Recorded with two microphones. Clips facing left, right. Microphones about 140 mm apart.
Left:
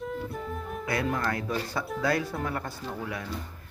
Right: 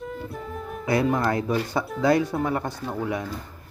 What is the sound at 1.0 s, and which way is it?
Speech, 20° right (ahead or behind).